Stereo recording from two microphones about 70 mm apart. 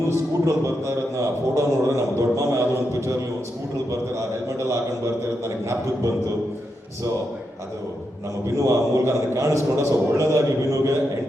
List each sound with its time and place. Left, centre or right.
0.4 s a man's voice: right
8.5 s a man's voice: right